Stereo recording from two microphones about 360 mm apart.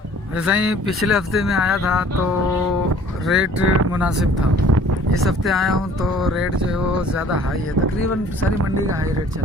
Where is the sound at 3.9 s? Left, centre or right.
Centre.